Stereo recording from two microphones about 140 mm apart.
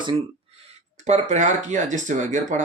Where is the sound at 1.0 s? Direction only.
55° right (ahead or behind).